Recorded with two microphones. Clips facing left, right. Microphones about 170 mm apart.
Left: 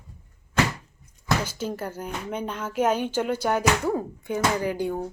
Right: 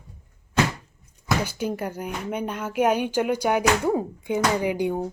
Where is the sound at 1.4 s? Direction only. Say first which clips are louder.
Right 3 dB; 15° right (ahead or behind).